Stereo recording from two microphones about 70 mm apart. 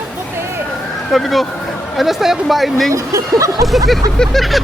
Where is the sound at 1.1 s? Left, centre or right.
Centre.